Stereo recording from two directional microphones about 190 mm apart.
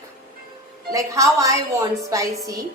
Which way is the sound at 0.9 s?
15° right (ahead or behind).